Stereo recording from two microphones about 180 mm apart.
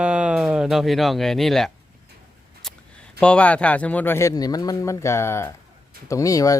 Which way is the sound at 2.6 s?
Centre (ahead or behind).